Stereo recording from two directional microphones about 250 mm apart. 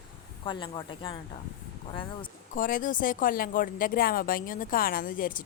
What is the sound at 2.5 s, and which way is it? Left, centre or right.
A woman's voice, left.